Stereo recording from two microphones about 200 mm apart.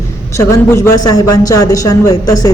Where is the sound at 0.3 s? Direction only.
15° left (ahead or behind).